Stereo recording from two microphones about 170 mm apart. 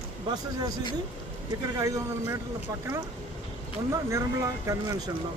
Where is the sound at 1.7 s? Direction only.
20° right (ahead or behind).